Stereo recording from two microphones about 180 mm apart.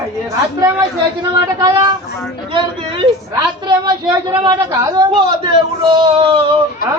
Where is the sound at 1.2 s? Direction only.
20° right (ahead or behind).